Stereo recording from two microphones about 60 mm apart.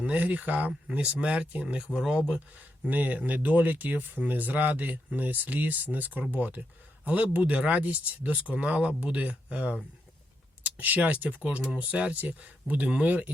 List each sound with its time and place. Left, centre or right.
0.0 s speech: right